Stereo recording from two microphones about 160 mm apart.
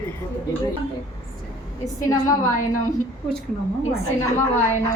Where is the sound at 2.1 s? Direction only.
20° left (ahead or behind).